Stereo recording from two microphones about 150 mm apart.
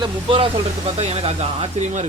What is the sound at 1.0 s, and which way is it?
Speech, 40° right (ahead or behind).